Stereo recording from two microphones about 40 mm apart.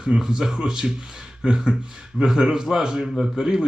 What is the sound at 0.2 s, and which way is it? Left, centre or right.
A man's voice, centre.